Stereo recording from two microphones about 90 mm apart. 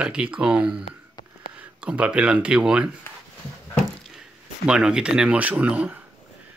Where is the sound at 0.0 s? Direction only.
10° right (ahead or behind).